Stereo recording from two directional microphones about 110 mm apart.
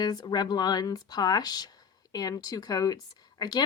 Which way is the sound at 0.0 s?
40° left (ahead or behind).